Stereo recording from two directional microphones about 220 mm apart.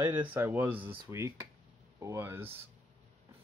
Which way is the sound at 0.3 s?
10° right (ahead or behind).